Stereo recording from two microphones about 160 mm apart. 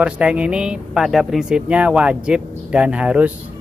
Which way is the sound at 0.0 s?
5° right (ahead or behind).